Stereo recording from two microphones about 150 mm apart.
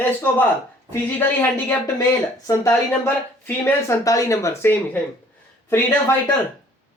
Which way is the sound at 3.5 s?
15° left (ahead or behind).